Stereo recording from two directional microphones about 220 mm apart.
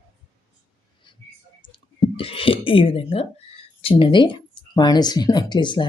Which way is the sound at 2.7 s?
25° left (ahead or behind).